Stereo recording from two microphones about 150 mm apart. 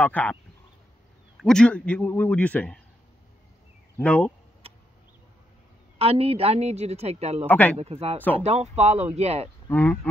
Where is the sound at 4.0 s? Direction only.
10° left (ahead or behind).